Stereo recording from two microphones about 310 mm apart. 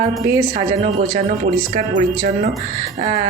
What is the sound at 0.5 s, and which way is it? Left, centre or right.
Speech, right.